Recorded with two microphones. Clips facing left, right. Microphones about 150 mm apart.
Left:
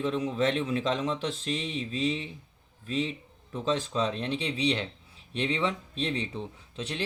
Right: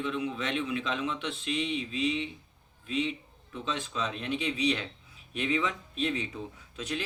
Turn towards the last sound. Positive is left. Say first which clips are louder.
# right 1 dB
turn(degrees=30)  # may be behind; listen again after turning